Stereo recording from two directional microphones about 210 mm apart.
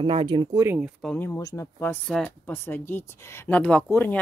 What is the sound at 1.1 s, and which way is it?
Speech, 15° left (ahead or behind).